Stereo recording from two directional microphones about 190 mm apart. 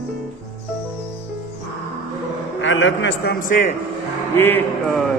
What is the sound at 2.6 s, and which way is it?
Speech, 75° left (ahead or behind).